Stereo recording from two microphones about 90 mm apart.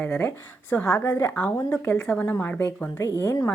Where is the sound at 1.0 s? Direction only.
35° left (ahead or behind).